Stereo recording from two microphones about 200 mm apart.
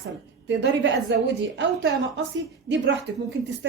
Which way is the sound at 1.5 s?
60° right (ahead or behind).